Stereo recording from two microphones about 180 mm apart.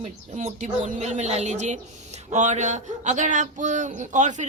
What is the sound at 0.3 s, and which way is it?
Speech, 40° right (ahead or behind).